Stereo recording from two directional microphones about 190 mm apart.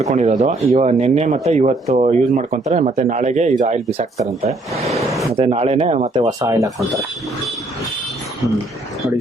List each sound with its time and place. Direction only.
0.0 s speech: 35° right (ahead or behind)
4.9 s a sound: centre (ahead or behind)
5.3 s speech: 35° right (ahead or behind)
6.2 s speech: 15° right (ahead or behind)